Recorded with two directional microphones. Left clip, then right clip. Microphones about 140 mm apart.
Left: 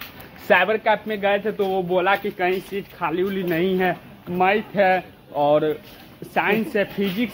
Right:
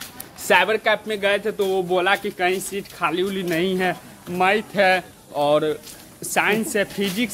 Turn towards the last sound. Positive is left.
turn(degrees=-20)  # may be behind; listen again after turning